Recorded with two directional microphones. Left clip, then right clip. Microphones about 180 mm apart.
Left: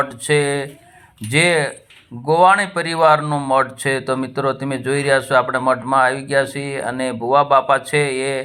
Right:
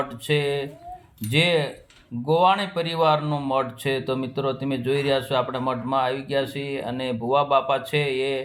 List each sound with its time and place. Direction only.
0.3 s speech: 15° left (ahead or behind)